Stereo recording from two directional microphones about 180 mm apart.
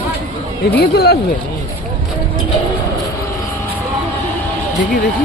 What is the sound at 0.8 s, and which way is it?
Speech, 60° left (ahead or behind).